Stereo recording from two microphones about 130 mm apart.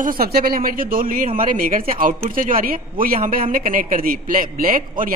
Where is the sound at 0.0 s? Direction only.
90° right.